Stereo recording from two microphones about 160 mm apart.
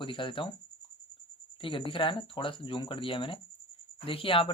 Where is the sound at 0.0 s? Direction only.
30° left (ahead or behind).